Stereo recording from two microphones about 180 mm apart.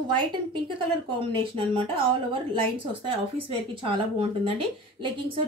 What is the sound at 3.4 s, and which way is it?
A woman's voice, 30° right (ahead or behind).